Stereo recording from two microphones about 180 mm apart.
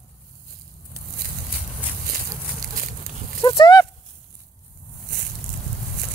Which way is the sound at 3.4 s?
20° left (ahead or behind).